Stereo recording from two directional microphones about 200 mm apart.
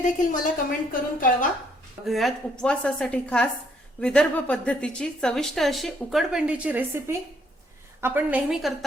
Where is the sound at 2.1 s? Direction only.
Centre (ahead or behind).